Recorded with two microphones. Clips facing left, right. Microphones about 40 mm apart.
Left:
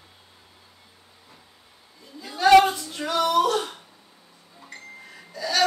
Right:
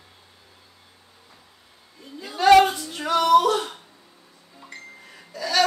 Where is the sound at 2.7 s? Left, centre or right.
Centre.